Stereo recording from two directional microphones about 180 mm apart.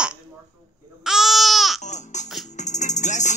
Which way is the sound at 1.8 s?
40° left (ahead or behind).